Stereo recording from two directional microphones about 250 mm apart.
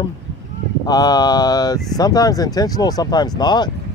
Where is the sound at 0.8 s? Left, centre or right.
Centre.